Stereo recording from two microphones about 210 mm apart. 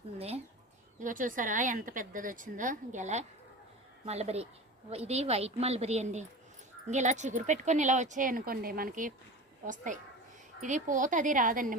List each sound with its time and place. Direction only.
0.2 s speech: 30° right (ahead or behind)